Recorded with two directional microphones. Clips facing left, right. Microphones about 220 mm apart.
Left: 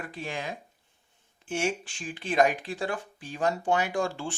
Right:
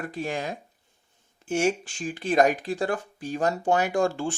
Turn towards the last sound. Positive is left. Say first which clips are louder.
# right 5 dB
turn(degrees=-45)  # may be behind; listen again after turning